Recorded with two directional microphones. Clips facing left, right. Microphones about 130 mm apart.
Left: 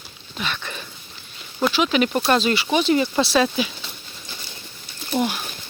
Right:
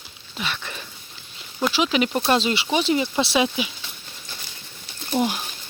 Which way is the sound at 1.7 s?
25° right (ahead or behind).